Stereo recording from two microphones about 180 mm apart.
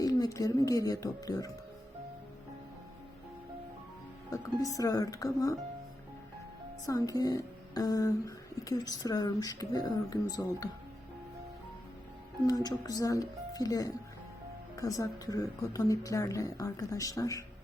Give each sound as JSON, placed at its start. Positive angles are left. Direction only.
{"t": 0.0, "sound": "speech", "side_deg": 20}
{"t": 4.8, "sound": "speech", "side_deg": 20}
{"t": 6.8, "sound": "speech", "side_deg": 20}
{"t": 12.6, "sound": "speech", "side_deg": 20}